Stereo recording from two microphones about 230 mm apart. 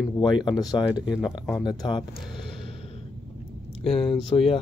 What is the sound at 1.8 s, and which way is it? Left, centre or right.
Speech, left.